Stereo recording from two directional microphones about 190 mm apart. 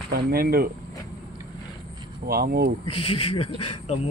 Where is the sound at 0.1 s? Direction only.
55° right (ahead or behind).